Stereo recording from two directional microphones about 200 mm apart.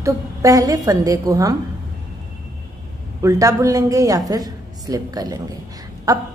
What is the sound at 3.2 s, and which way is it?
A woman's voice, 15° right (ahead or behind).